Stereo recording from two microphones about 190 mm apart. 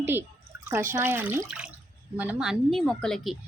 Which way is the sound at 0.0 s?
10° right (ahead or behind).